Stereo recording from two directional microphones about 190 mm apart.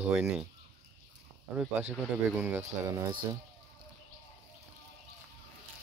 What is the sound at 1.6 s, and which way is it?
Speech, 10° right (ahead or behind).